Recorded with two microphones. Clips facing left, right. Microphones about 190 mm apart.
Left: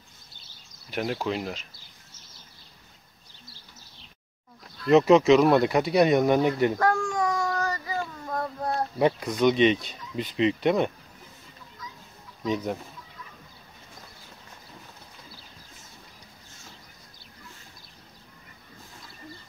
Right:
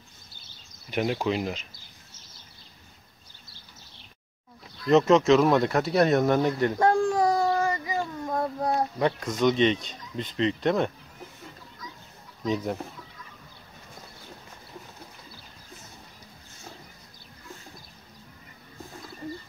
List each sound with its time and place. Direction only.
0.8 s speech: centre (ahead or behind)
4.8 s speech: 5° left (ahead or behind)
6.3 s speech: 10° left (ahead or behind)
6.8 s a sound: 35° right (ahead or behind); by 8.8 s 15° right (ahead or behind)
9.3 s speech: centre (ahead or behind)
12.4 s speech: 5° left (ahead or behind)